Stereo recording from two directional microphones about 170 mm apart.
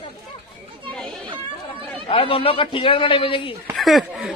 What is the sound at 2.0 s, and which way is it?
Speech, 30° left (ahead or behind).